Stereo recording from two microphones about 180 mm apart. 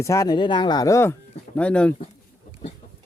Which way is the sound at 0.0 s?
15° left (ahead or behind).